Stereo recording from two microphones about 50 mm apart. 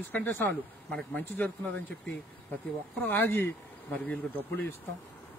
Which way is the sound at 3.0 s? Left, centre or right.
Left.